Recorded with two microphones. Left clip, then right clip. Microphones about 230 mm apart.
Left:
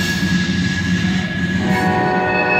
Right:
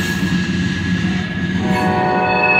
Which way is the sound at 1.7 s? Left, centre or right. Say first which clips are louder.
Right 1 dB; left.